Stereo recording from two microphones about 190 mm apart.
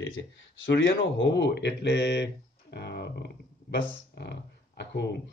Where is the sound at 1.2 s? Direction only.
65° left (ahead or behind).